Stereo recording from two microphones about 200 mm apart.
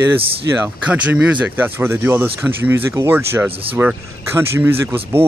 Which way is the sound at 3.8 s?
10° right (ahead or behind).